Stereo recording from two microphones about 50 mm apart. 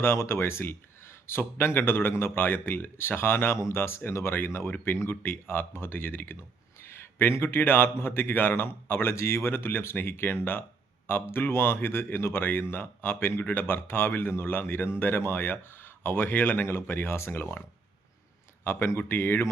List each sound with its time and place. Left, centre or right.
0.0 s a man's voice: left
18.6 s a man's voice: left